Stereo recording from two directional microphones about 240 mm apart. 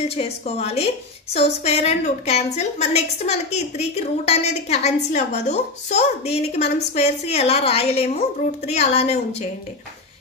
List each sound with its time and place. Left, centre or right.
0.1 s a woman's voice: left